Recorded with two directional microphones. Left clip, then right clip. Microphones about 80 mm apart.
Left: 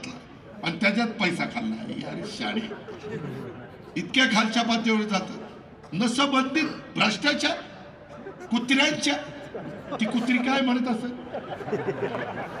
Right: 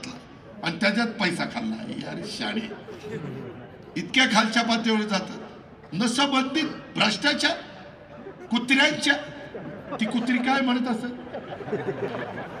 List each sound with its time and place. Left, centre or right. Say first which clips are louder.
0.6 s a man's voice: even; right
3.9 s a man's voice: right 1 dB; right
11.5 s speech: even; left